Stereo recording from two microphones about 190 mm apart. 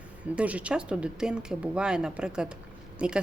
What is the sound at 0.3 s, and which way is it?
A woman's voice, 5° right (ahead or behind).